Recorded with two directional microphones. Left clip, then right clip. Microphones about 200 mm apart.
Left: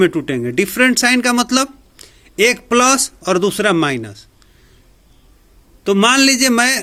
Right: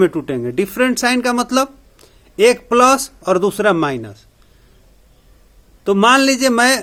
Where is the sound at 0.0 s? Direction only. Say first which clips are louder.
Left 1 dB; 10° left (ahead or behind).